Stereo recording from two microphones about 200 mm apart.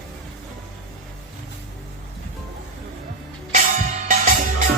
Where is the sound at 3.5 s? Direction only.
40° right (ahead or behind).